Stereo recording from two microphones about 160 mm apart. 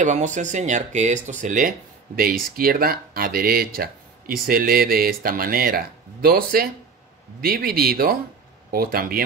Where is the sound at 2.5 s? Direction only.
65° right (ahead or behind).